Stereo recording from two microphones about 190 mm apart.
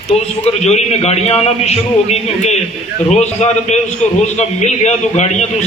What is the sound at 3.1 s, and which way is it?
A man's voice, 35° left (ahead or behind).